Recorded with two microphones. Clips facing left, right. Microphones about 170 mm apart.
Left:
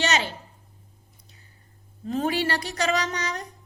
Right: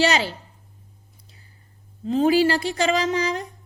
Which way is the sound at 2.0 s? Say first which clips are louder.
Right 7 dB; 30° right (ahead or behind).